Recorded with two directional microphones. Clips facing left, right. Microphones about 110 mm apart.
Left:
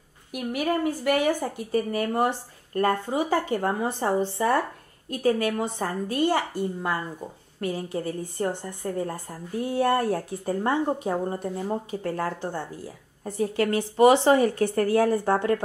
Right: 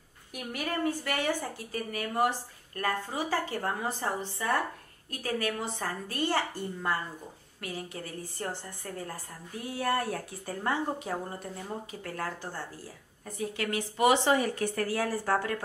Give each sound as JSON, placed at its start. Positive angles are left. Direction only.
{"t": 0.3, "sound": "a woman's voice", "side_deg": 10}
{"t": 1.2, "sound": "a woman's voice", "side_deg": 35}
{"t": 3.2, "sound": "a woman's voice", "side_deg": 20}
{"t": 4.0, "sound": "speech", "side_deg": 35}
{"t": 5.2, "sound": "a woman's voice", "side_deg": 20}
{"t": 7.6, "sound": "a woman's voice", "side_deg": 30}
{"t": 13.2, "sound": "speech", "side_deg": 35}